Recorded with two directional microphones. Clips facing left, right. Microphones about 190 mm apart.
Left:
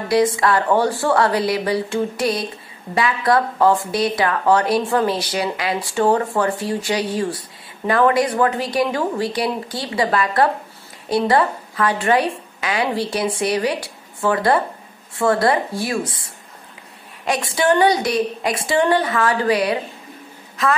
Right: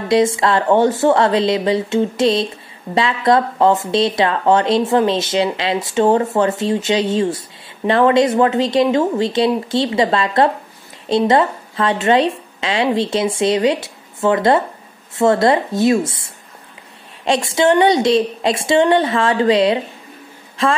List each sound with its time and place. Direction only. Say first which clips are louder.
0.1 s a woman's voice: right 2 dB; 25° right (ahead or behind)